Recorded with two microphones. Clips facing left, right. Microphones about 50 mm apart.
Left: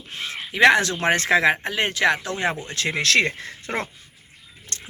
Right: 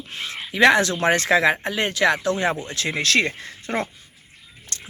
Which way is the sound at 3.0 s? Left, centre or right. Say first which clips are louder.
Left 1 dB; left.